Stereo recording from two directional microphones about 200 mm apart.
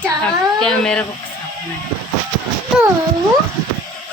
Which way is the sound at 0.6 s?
5° left (ahead or behind).